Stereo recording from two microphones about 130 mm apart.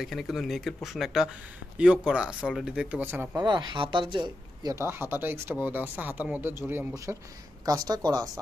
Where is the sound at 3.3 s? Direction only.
35° right (ahead or behind).